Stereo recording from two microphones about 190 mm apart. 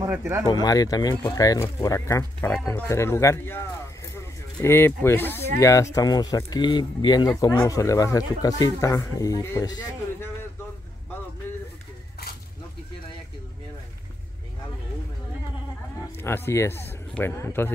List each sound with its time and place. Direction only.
0.0 s speech: 15° right (ahead or behind)
0.5 s speech: 20° left (ahead or behind)
16.2 s speech: 10° left (ahead or behind)